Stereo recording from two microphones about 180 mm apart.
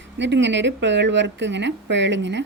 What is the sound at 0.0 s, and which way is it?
Speech, 85° right.